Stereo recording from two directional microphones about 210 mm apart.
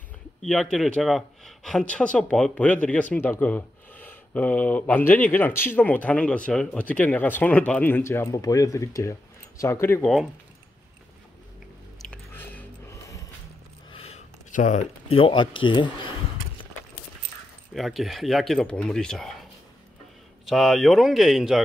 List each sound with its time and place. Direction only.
0.4 s speech: centre (ahead or behind)
12.0 s chewing: 5° left (ahead or behind)
13.8 s speech: 25° left (ahead or behind)
17.7 s speech: centre (ahead or behind)
20.4 s speech: centre (ahead or behind)